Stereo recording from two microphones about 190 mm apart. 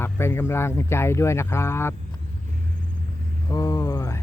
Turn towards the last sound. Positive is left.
turn(degrees=20)  # may be behind; listen again after turning